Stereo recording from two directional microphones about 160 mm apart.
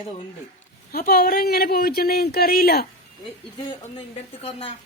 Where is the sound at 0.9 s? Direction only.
70° left (ahead or behind).